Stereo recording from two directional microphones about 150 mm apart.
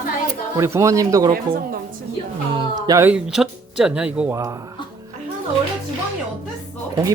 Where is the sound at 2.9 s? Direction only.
15° right (ahead or behind).